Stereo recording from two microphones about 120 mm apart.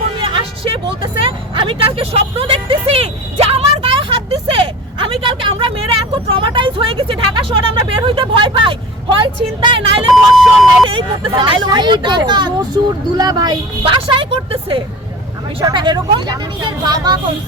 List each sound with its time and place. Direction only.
0.2 s vehicle: 50° right (ahead or behind)
1.2 s a sound: 45° right (ahead or behind)
10.3 s speech: centre (ahead or behind)
10.8 s speech: 45° right (ahead or behind)